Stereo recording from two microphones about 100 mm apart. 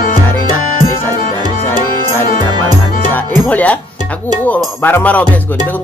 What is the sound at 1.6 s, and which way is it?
Music, 20° left (ahead or behind).